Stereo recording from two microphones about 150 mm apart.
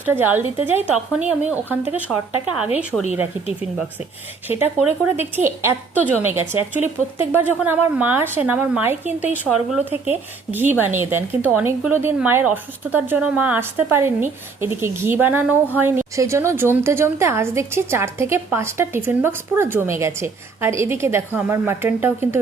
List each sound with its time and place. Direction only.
0.0 s speech: 15° right (ahead or behind)
4.4 s speech: 15° right (ahead or behind)